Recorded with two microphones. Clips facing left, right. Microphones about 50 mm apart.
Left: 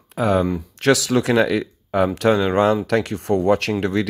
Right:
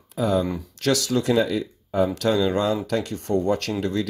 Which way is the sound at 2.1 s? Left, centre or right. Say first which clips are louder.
Left 4 dB; left.